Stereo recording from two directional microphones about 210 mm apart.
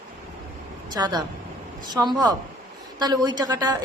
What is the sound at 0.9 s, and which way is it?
A woman's voice, 20° right (ahead or behind).